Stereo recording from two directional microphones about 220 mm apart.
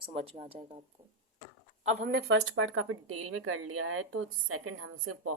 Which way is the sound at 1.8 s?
40° right (ahead or behind).